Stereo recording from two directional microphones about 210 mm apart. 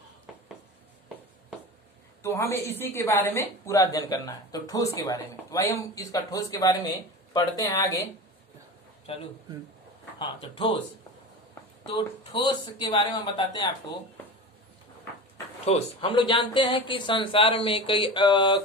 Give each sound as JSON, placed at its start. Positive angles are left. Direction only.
{"t": 0.3, "sound": "a sound", "side_deg": 0}
{"t": 2.2, "sound": "a woman's voice", "side_deg": 10}
{"t": 9.1, "sound": "speech", "side_deg": 30}
{"t": 11.8, "sound": "speech", "side_deg": 25}
{"t": 15.6, "sound": "speech", "side_deg": 30}